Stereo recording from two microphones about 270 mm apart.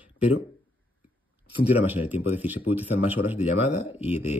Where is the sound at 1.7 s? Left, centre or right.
Centre.